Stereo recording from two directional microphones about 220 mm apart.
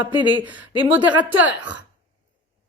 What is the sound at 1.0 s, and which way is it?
Speech, 5° right (ahead or behind).